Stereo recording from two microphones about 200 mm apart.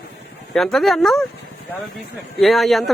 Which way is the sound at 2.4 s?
Centre (ahead or behind).